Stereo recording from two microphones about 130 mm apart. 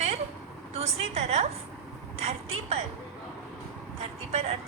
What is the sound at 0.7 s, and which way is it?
A woman's voice, 55° right (ahead or behind).